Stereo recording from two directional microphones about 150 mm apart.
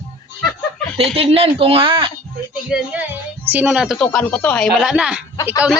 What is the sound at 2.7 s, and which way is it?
A woman's voice, 10° right (ahead or behind).